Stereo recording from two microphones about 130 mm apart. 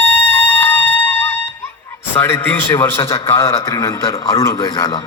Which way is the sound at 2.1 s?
15° left (ahead or behind).